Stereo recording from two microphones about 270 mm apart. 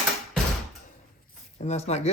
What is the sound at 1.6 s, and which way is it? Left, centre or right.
Speech, left.